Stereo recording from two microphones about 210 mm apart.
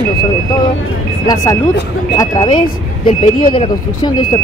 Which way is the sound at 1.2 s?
15° left (ahead or behind).